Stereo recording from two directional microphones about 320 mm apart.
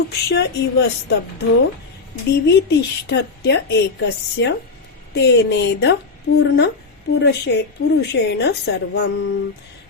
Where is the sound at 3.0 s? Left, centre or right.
Left.